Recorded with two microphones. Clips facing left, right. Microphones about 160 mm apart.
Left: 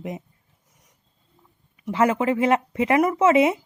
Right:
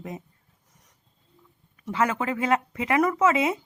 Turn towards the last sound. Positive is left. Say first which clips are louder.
# left 5 dB
turn(degrees=25)  # may be behind; listen again after turning